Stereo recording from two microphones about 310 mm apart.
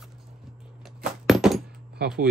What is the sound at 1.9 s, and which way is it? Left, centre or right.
Speech, right.